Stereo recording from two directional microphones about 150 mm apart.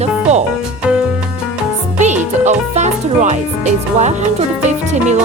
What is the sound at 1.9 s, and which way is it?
Speech, 50° right (ahead or behind).